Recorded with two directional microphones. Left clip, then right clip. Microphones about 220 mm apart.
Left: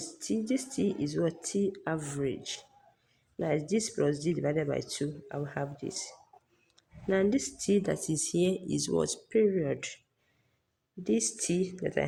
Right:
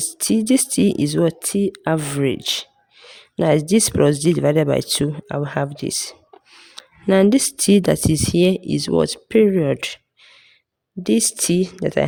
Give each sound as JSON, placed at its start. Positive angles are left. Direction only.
{"t": 0.0, "sound": "speech", "side_deg": -50}
{"t": 11.0, "sound": "speech", "side_deg": -50}